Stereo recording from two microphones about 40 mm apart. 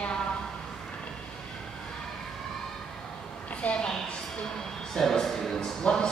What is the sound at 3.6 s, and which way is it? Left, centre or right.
Speech, left.